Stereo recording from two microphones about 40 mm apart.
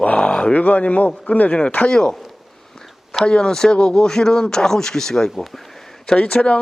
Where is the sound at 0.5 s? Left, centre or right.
Left.